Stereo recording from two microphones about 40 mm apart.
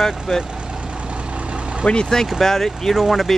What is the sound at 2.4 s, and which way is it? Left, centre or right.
Speech, centre.